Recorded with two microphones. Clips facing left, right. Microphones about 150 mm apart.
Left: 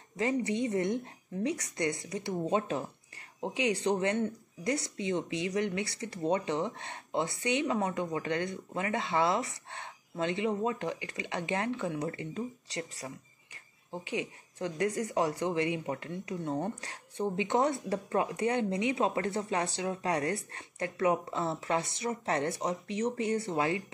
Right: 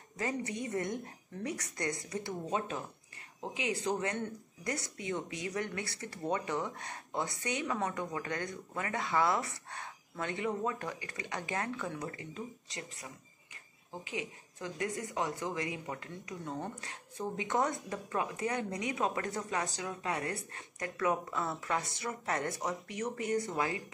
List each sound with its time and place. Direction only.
0.2 s speech: 25° left (ahead or behind)